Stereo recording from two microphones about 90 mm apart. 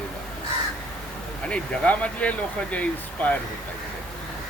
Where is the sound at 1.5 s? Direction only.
15° left (ahead or behind).